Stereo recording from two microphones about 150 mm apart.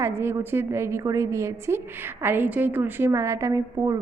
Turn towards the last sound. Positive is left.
turn(degrees=-20)  # may be behind; listen again after turning